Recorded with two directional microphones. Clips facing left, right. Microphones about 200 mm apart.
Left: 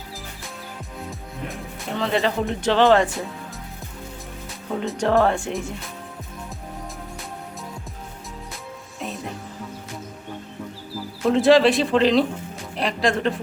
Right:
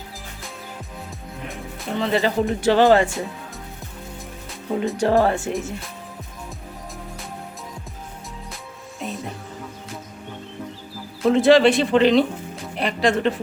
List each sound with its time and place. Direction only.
2.0 s speech: centre (ahead or behind)
4.8 s speech: 5° right (ahead or behind)
9.0 s music: centre (ahead or behind)
11.3 s a woman's voice: centre (ahead or behind)